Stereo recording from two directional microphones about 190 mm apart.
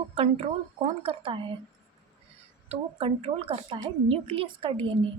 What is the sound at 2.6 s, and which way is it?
A woman's voice, 30° right (ahead or behind).